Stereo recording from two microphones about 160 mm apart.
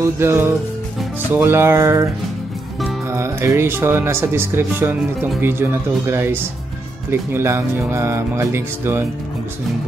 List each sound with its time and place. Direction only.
0.0 s speech: 15° right (ahead or behind)
3.1 s speech: 15° right (ahead or behind)